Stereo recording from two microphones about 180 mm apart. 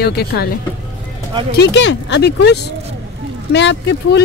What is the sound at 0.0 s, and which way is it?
Speech, 60° left (ahead or behind).